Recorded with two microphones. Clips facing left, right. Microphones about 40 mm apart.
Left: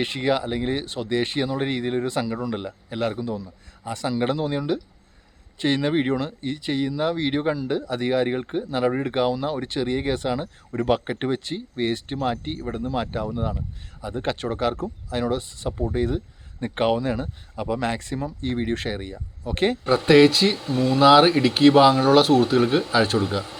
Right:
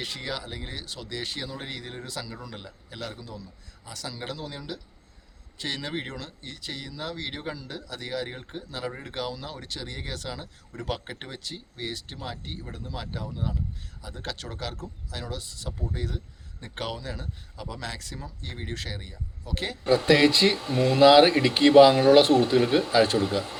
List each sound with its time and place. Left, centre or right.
0.0 s speech: left
9.1 s speech: left
14.0 s speech: left
20.1 s speech: centre
21.7 s speech: centre